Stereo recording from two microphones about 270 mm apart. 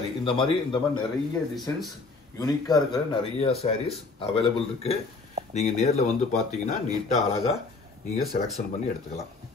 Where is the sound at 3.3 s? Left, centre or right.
Left.